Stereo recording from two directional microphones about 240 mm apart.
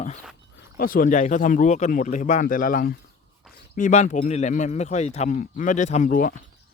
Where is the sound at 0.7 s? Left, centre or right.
Left.